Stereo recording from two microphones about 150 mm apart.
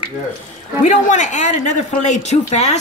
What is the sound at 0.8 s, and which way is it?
Speech, 55° left (ahead or behind).